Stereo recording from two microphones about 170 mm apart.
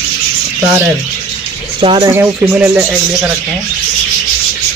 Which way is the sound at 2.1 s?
10° right (ahead or behind).